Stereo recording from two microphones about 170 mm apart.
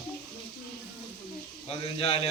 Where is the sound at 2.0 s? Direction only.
35° left (ahead or behind).